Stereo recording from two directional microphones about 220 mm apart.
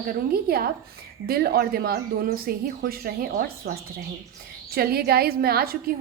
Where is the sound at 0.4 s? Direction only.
45° right (ahead or behind).